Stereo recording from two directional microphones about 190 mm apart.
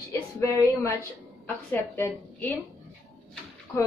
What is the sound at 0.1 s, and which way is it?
A woman's voice, 15° left (ahead or behind).